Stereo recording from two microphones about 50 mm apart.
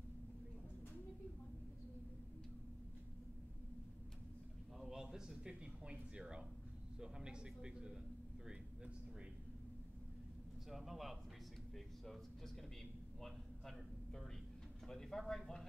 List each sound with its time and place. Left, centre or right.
4.7 s a man's voice: centre
10.7 s a man's voice: centre
11.7 s a sound: centre
14.9 s speech: centre